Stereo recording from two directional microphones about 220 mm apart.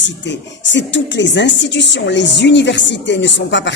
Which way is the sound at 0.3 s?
55° left (ahead or behind).